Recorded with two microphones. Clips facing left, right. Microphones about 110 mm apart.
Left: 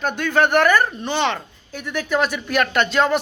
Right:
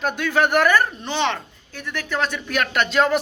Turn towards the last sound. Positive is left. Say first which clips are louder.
# left 1 dB
turn(degrees=0)  # may be behind; listen again after turning